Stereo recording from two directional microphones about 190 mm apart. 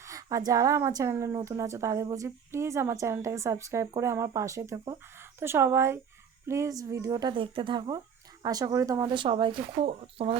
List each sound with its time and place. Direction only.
0.0 s a woman's voice: 15° right (ahead or behind)